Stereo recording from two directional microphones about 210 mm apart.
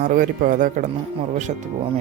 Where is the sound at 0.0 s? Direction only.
40° right (ahead or behind).